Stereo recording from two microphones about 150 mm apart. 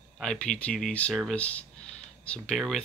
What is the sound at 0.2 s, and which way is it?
Speech, 5° left (ahead or behind).